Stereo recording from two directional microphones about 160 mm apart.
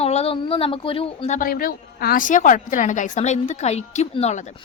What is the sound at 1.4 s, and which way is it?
A woman's voice, 65° left (ahead or behind).